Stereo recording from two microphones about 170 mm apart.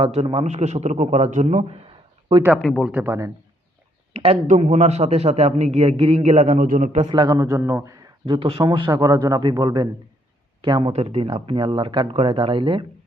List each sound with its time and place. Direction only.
0.0 s a man's voice: 35° right (ahead or behind)
2.6 s speech: centre (ahead or behind)
2.9 s a man's voice: 15° right (ahead or behind)
4.1 s a man's voice: 35° right (ahead or behind)
7.0 s a man's voice: 25° right (ahead or behind)
8.3 s a man's voice: 35° right (ahead or behind)